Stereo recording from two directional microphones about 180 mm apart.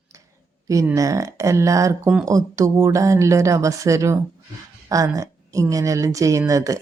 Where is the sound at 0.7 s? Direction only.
20° right (ahead or behind).